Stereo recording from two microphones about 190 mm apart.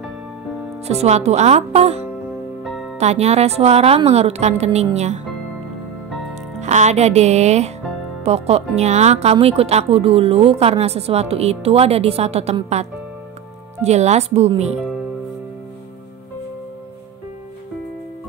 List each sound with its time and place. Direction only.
0.8 s speech: 35° right (ahead or behind)
6.6 s speech: 40° right (ahead or behind)